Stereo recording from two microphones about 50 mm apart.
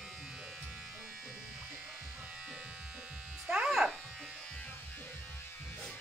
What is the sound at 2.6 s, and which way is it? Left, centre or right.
Electric shaver, right.